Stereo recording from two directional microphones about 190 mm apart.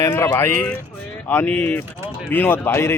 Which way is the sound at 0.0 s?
10° left (ahead or behind).